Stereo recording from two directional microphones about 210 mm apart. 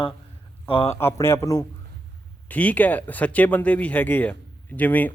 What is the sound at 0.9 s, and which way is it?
Speech, 10° left (ahead or behind).